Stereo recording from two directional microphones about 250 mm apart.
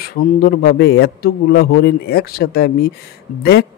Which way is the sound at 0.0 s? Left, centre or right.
Left.